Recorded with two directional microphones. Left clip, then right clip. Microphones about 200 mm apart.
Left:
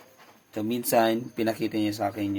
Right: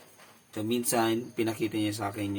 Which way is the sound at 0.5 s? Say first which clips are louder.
Left 5 dB; 40° left (ahead or behind).